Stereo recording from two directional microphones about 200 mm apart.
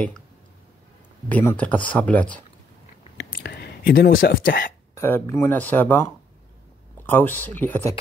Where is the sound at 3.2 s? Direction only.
55° left (ahead or behind).